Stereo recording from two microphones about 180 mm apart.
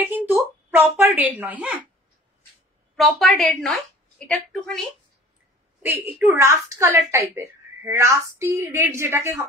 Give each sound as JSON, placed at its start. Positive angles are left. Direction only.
{"t": 0.0, "sound": "a sound", "side_deg": -10}
{"t": 1.4, "sound": "a woman's voice", "side_deg": -10}
{"t": 3.0, "sound": "a woman's voice", "side_deg": 0}
{"t": 6.3, "sound": "a woman's voice", "side_deg": -15}